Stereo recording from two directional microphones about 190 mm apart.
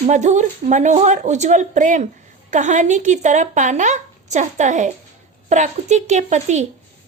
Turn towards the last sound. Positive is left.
turn(degrees=-40)  # may be behind; listen again after turning